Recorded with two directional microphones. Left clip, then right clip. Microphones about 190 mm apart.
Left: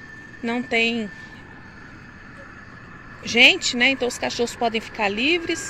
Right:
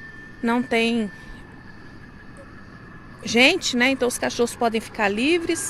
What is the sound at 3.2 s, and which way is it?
Speech, 20° right (ahead or behind).